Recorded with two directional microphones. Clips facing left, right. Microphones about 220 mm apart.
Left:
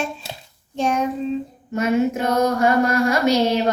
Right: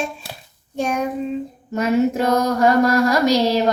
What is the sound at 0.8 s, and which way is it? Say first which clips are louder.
Child singing: left 1 dB; 10° right (ahead or behind).